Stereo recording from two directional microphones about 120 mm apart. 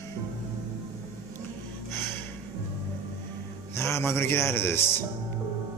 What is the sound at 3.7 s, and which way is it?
Speech, 20° left (ahead or behind).